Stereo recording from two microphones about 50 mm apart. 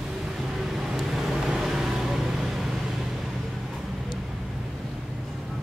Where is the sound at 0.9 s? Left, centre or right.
Centre.